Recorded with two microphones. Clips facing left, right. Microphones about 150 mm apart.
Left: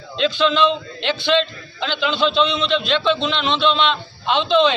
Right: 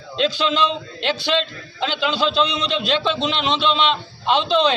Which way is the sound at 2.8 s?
40° right (ahead or behind).